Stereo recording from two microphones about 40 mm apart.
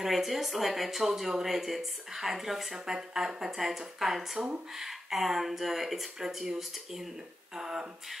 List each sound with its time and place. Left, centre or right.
0.0 s speech: centre
6.2 s speech: centre